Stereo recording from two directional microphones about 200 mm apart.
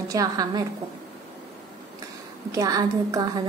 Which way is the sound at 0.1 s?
15° right (ahead or behind).